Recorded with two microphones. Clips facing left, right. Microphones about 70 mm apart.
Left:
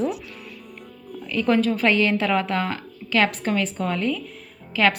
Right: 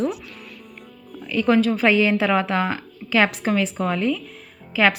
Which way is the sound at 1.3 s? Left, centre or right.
Centre.